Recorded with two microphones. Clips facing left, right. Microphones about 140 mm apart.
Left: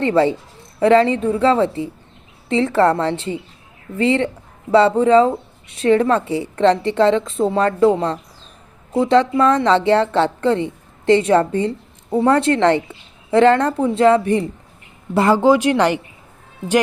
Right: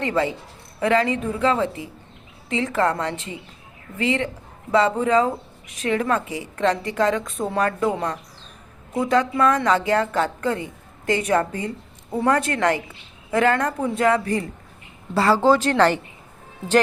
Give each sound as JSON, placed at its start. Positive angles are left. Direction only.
{"t": 0.0, "sound": "a woman's voice", "side_deg": 30}